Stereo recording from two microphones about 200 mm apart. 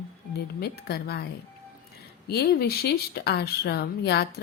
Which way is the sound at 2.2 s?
55° left (ahead or behind).